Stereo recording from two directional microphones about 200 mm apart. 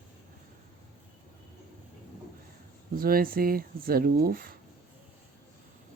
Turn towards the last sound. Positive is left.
turn(degrees=-45)  # may be behind; listen again after turning